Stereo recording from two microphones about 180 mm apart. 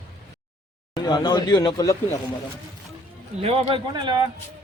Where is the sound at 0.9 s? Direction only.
25° left (ahead or behind).